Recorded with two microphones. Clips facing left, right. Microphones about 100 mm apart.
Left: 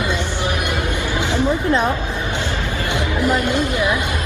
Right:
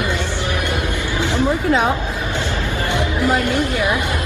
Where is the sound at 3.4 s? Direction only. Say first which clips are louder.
Even; 20° left (ahead or behind).